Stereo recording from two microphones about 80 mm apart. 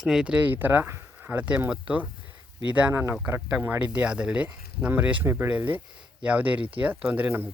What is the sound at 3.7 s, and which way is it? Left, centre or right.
Speech, centre.